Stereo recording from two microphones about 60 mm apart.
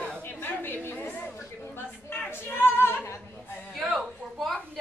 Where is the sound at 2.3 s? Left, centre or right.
Left.